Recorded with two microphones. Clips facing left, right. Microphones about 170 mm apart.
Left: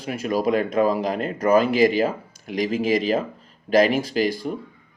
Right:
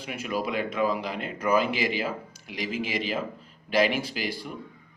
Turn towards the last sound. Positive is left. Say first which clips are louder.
# left 10 dB
turn(degrees=45)  # may be behind; listen again after turning